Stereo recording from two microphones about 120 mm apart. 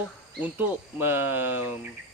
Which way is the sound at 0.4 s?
15° right (ahead or behind).